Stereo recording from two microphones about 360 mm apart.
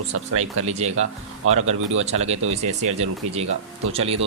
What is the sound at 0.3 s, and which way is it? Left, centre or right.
Speech, centre.